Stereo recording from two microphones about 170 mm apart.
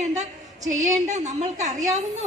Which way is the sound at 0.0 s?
40° right (ahead or behind).